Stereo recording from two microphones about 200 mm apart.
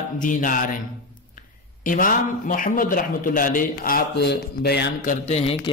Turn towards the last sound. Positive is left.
turn(degrees=35)  # may be behind; listen again after turning